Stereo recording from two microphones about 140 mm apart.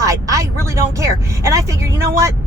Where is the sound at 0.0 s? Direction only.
25° right (ahead or behind).